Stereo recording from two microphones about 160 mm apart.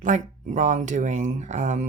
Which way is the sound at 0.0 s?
50° right (ahead or behind).